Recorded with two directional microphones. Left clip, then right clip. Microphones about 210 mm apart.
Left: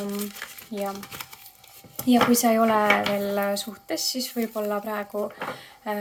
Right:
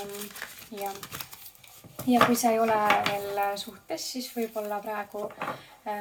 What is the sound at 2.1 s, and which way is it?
Speech, 50° left (ahead or behind).